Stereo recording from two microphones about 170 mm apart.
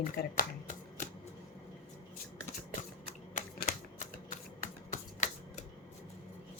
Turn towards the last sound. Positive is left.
turn(degrees=45)  # may be behind; listen again after turning